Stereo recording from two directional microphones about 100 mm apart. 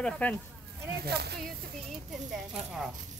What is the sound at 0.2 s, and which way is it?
Speech, 15° left (ahead or behind).